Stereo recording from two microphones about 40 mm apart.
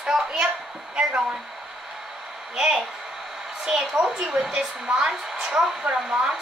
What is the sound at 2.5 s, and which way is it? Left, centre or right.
A woman's voice, centre.